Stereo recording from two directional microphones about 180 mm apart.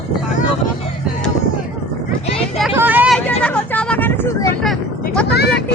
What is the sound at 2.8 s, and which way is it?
Vehicle, 10° right (ahead or behind).